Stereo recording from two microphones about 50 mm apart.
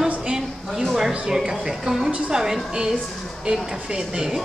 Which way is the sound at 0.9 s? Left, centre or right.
Centre.